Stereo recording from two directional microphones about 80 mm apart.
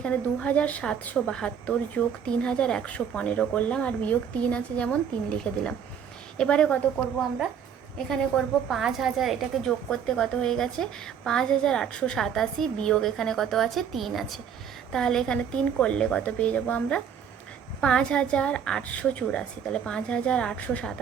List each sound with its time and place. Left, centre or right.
0.0 s a woman's voice: centre
7.9 s a woman's voice: centre